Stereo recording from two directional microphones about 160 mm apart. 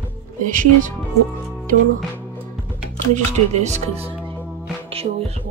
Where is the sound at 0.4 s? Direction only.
55° right (ahead or behind).